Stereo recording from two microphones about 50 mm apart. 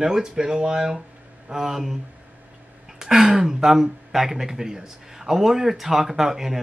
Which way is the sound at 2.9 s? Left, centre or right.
Centre.